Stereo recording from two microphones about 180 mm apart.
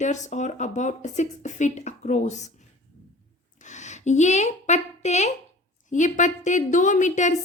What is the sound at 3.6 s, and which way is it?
A woman's voice, 40° left (ahead or behind).